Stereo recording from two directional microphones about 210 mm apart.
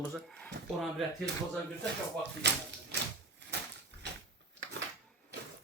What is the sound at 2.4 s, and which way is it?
Speech, 55° right (ahead or behind).